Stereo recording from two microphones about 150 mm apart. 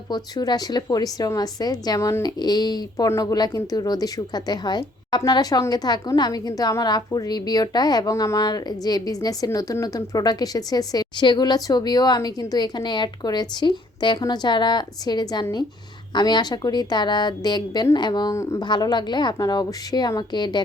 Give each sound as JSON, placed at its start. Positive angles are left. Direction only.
{"t": 0.1, "sound": "a woman's voice", "side_deg": 25}